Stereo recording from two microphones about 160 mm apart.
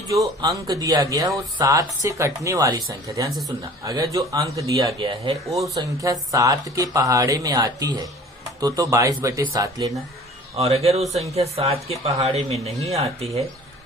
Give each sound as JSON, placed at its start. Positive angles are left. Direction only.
{"t": 0.4, "sound": "speech", "side_deg": -20}
{"t": 5.0, "sound": "a woman's voice", "side_deg": -35}
{"t": 5.5, "sound": "speech", "side_deg": 0}
{"t": 5.7, "sound": "speech", "side_deg": -20}
{"t": 10.6, "sound": "a woman's voice", "side_deg": -40}